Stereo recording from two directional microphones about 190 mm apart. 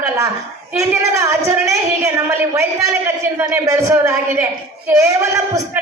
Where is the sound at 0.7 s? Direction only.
15° right (ahead or behind).